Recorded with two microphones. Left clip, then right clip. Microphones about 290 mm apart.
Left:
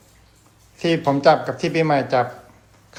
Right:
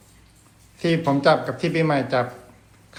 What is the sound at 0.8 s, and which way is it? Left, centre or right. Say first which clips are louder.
Speech: left 2 dB; centre.